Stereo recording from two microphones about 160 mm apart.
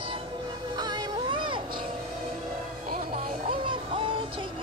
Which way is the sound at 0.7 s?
25° right (ahead or behind).